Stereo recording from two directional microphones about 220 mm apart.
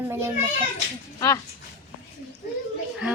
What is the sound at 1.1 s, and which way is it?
Speech, 15° left (ahead or behind).